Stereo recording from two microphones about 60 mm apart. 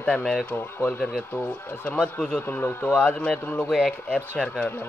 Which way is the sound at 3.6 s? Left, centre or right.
Centre.